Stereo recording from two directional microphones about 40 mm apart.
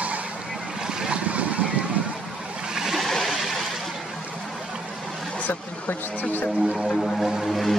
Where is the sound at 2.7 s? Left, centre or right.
Centre.